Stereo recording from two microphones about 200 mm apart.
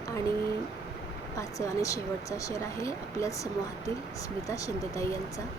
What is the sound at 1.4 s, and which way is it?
A woman's voice, 15° left (ahead or behind).